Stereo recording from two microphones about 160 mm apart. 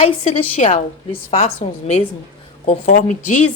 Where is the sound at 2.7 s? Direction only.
50° left (ahead or behind).